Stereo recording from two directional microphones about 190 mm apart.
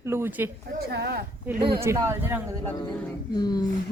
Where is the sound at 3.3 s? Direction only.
20° left (ahead or behind).